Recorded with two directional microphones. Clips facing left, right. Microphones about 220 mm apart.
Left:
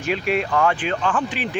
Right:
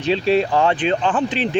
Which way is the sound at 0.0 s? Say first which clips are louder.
Right 5 dB; 30° right (ahead or behind).